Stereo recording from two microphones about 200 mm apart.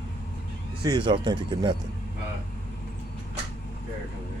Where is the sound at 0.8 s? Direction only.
25° right (ahead or behind).